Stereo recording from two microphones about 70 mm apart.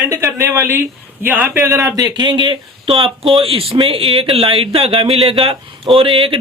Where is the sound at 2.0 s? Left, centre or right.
Right.